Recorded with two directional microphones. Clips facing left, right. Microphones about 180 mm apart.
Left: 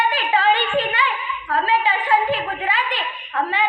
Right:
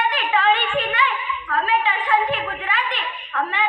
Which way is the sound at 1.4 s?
35° left (ahead or behind).